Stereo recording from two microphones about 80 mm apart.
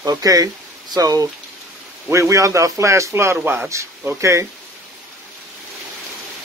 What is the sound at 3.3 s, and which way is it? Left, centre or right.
Speech, centre.